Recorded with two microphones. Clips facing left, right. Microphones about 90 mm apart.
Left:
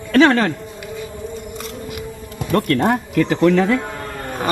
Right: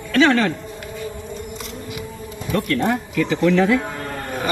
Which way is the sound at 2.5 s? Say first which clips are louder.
Left 3 dB; 55° left (ahead or behind).